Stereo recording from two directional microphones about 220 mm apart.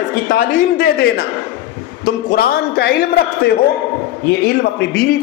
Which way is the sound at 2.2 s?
45° left (ahead or behind).